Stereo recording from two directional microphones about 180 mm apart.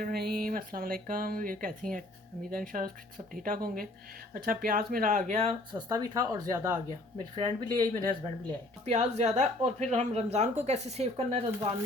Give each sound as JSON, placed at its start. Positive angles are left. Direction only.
{"t": 0.0, "sound": "speech", "side_deg": -60}
{"t": 5.9, "sound": "speech", "side_deg": -20}
{"t": 8.8, "sound": "speech", "side_deg": -40}